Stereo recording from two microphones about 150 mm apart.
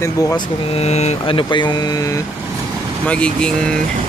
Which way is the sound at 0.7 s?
45° left (ahead or behind).